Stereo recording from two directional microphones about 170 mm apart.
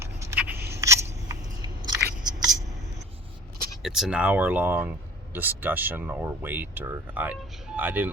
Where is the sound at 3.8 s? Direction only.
5° right (ahead or behind).